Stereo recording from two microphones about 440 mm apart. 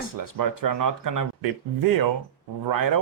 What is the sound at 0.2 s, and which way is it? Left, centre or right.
Speech, right.